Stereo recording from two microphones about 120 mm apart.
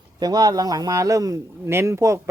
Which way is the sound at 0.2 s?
35° right (ahead or behind).